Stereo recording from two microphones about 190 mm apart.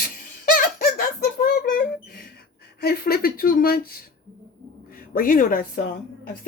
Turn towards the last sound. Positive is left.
turn(degrees=50)  # may be behind; listen again after turning